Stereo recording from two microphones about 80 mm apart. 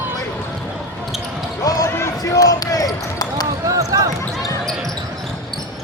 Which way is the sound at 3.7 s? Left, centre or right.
Right.